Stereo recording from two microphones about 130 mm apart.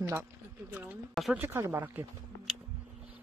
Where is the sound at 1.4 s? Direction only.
20° right (ahead or behind).